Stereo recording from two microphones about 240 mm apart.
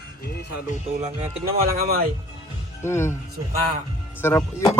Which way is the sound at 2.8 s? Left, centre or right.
Centre.